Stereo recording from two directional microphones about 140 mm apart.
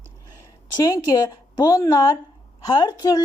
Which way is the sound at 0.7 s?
25° left (ahead or behind).